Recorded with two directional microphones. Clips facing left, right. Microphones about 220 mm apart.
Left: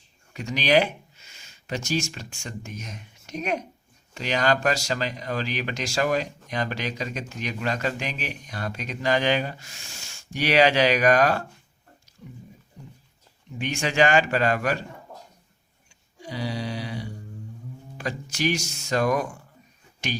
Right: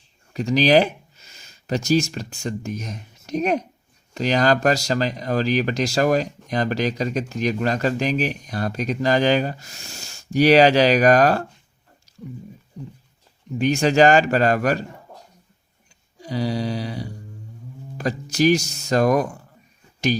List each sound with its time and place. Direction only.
0.3 s speech: 35° right (ahead or behind)
13.6 s speech: 40° right (ahead or behind)
16.2 s a sound: 40° right (ahead or behind)
17.9 s speech: 40° right (ahead or behind)